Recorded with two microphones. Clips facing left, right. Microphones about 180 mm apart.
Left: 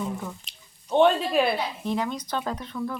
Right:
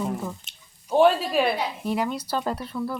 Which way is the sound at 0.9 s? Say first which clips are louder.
Right 1 dB; 5° right (ahead or behind).